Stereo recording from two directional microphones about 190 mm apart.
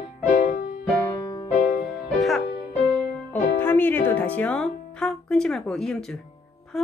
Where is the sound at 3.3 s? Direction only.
10° left (ahead or behind).